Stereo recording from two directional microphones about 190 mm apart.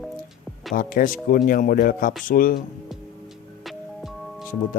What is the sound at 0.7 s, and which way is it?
Speech, 45° left (ahead or behind).